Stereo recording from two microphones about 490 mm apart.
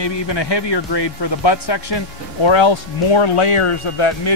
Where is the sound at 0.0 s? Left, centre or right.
Left.